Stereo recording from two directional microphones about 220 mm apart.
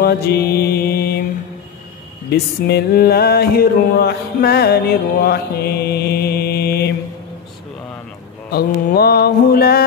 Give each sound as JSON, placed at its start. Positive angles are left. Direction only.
{"t": 0.0, "sound": "mantra", "side_deg": 45}
{"t": 2.3, "sound": "music", "side_deg": 45}
{"t": 8.5, "sound": "music", "side_deg": 45}